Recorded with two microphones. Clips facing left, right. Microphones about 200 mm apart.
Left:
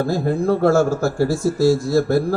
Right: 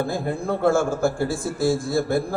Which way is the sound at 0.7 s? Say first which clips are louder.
Left 4 dB; 55° right (ahead or behind).